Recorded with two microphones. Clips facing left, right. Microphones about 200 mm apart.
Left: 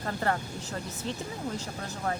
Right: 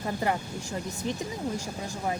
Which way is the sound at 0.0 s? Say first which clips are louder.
Right 1 dB; 15° right (ahead or behind).